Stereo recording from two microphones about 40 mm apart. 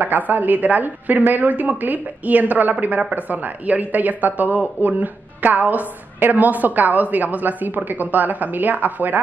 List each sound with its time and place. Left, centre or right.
0.0 s speech: right